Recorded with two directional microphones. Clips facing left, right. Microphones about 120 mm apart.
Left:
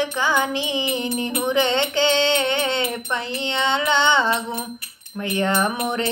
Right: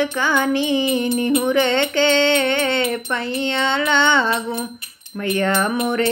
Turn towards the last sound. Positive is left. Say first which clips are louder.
# right 3 dB
turn(degrees=20)  # may be behind; listen again after turning